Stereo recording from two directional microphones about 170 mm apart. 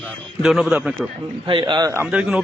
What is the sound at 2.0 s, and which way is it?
Speech, centre (ahead or behind).